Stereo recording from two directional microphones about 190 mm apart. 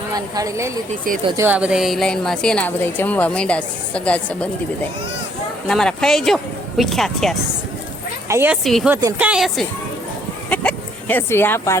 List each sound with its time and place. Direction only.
0.1 s a woman's voice: 20° right (ahead or behind); by 4.4 s 5° left (ahead or behind)
5.6 s a woman's voice: 5° left (ahead or behind)
8.3 s speech: 10° right (ahead or behind)
8.6 s a woman's voice: centre (ahead or behind)
8.9 s speech: 15° right (ahead or behind); by 11.8 s 15° left (ahead or behind)